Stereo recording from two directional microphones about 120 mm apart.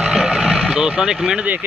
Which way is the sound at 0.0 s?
5° right (ahead or behind).